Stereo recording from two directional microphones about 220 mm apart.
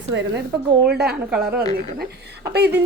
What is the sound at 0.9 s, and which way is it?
Speech, 45° right (ahead or behind).